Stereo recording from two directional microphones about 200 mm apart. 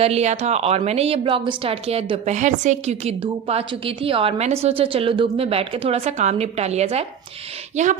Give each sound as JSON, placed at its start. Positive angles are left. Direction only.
{"t": 0.0, "sound": "a woman's voice", "side_deg": -30}